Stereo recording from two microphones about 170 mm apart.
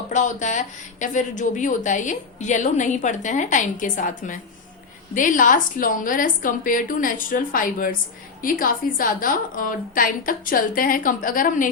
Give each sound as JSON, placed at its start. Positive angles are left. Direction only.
{"t": 0.1, "sound": "a woman's voice", "side_deg": 45}